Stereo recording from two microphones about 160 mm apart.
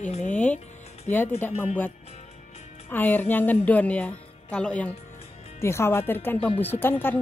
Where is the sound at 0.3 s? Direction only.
10° left (ahead or behind).